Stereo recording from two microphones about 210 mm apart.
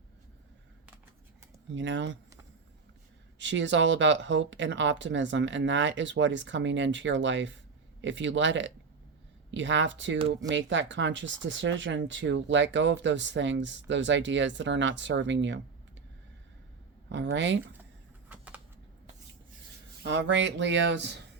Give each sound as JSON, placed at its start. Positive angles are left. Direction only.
{"t": 1.7, "sound": "speech", "side_deg": -60}
{"t": 3.3, "sound": "speech", "side_deg": -60}
{"t": 10.2, "sound": "speech", "side_deg": -25}
{"t": 10.5, "sound": "speech", "side_deg": -60}
{"t": 17.1, "sound": "speech", "side_deg": -60}
{"t": 18.3, "sound": "a sound", "side_deg": -5}
{"t": 20.0, "sound": "speech", "side_deg": -60}